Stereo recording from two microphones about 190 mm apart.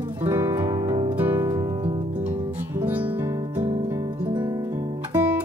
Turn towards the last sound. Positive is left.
turn(degrees=-15)  # may be behind; listen again after turning